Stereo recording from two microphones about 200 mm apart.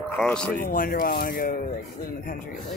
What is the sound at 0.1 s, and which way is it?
Speech, 5° left (ahead or behind).